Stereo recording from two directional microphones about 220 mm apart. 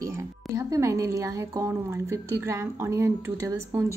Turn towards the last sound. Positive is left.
turn(degrees=-10)  # may be behind; listen again after turning